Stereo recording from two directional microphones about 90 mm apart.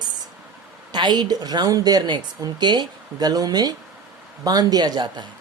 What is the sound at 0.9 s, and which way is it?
Speech, 55° right (ahead or behind).